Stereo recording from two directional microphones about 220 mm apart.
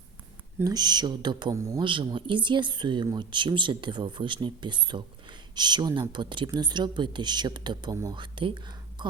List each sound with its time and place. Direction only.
0.6 s speech: 20° right (ahead or behind)